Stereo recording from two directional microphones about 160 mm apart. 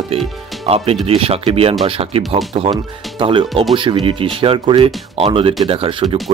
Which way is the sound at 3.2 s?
30° right (ahead or behind).